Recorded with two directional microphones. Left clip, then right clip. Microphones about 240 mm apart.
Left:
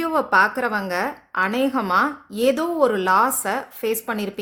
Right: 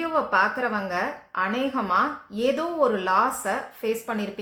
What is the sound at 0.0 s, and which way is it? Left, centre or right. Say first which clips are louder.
A woman's voice: left 4 dB; left.